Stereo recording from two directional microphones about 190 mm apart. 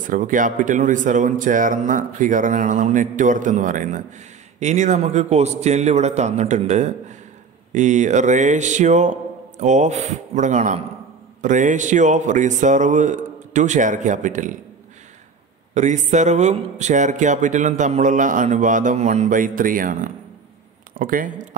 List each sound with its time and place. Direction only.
0.0 s speech: 45° right (ahead or behind)
15.7 s speech: 40° right (ahead or behind)